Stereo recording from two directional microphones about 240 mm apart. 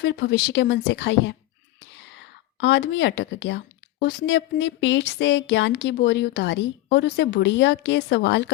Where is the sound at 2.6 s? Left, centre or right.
Left.